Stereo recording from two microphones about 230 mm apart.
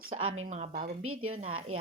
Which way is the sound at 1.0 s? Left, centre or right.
Right.